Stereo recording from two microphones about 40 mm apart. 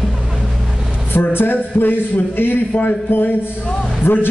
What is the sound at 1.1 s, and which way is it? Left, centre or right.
A man's voice, left.